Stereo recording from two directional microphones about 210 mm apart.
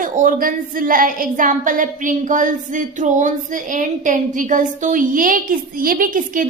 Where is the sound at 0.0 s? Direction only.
40° right (ahead or behind).